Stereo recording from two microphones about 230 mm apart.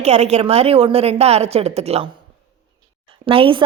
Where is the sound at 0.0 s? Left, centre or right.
Right.